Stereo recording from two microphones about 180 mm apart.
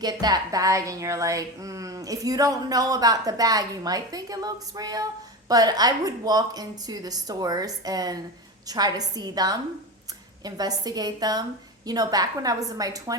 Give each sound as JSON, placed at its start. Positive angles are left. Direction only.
{"t": 0.0, "sound": "a woman's voice", "side_deg": -25}